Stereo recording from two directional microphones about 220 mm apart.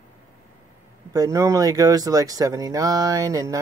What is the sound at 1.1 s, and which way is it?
Speech, 15° right (ahead or behind).